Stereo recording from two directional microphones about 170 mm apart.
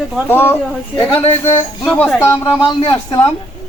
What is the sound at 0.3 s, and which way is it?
Speech, 15° left (ahead or behind).